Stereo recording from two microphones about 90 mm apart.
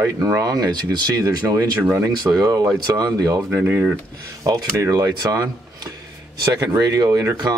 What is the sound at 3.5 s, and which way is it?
Speech, 15° right (ahead or behind).